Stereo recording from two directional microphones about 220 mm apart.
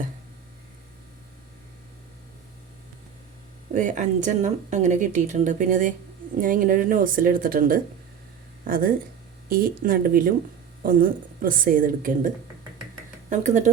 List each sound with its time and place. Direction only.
3.7 s speech: 35° right (ahead or behind)
13.3 s speech: 35° right (ahead or behind)